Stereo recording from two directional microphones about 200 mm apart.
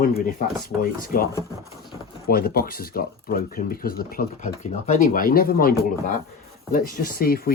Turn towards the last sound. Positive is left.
turn(degrees=45)  # may be behind; listen again after turning